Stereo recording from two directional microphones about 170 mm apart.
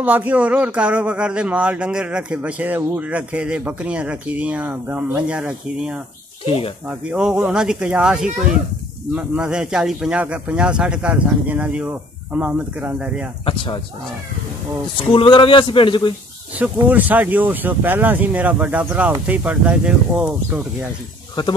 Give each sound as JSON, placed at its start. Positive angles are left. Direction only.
{"t": 0.0, "sound": "a man's voice", "side_deg": -10}
{"t": 6.4, "sound": "speech", "side_deg": 30}
{"t": 6.9, "sound": "a man's voice", "side_deg": -5}
{"t": 15.0, "sound": "speech", "side_deg": 30}
{"t": 16.5, "sound": "a man's voice", "side_deg": -10}